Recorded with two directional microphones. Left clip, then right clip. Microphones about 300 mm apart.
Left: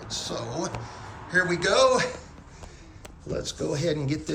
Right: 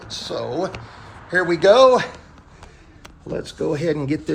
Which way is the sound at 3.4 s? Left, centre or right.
Centre.